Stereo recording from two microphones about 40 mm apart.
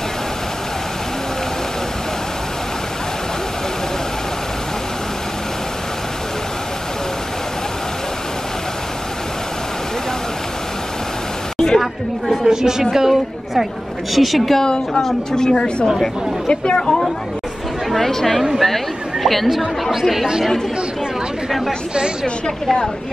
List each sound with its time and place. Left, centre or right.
11.5 s a sound: centre
12.4 s a woman's voice: centre
14.6 s speech: centre
17.9 s a woman's voice: centre
19.6 s speech: centre
21.5 s speech: centre
22.2 s speech: centre